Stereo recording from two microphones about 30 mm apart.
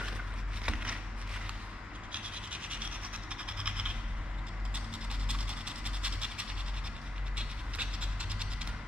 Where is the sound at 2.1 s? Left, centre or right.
Right.